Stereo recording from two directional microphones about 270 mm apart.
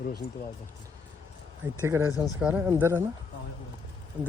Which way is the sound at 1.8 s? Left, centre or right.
Centre.